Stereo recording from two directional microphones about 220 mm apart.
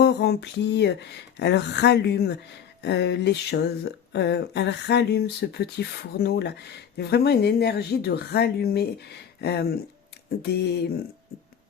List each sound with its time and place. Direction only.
0.0 s speech: 50° left (ahead or behind)